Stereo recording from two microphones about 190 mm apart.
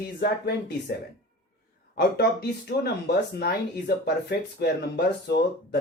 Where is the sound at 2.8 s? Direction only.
55° left (ahead or behind).